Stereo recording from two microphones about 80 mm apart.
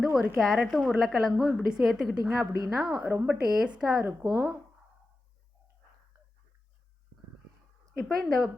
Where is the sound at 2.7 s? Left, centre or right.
Centre.